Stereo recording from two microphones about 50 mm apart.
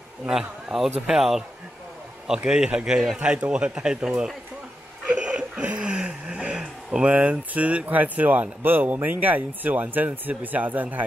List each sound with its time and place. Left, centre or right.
0.3 s speech: centre
2.2 s speech: centre
5.0 s a sound: centre